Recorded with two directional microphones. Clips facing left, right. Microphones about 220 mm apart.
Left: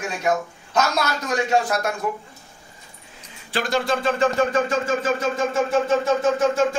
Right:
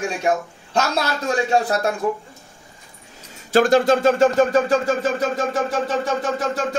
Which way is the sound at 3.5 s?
45° right (ahead or behind).